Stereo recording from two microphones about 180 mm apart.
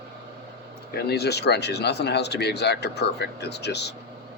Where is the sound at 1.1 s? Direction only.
65° left (ahead or behind).